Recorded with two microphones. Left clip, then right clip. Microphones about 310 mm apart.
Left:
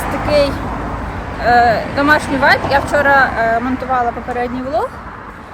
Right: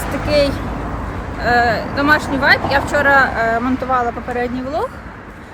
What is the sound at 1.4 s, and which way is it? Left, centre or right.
Speech, centre.